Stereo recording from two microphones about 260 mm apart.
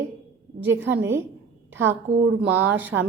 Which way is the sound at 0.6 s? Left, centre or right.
Centre.